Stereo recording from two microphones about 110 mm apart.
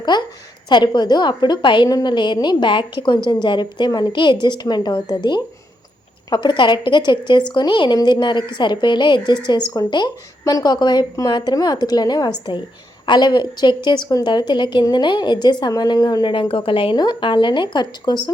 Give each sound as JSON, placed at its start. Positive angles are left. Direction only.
{"t": 0.1, "sound": "a woman's voice", "side_deg": 40}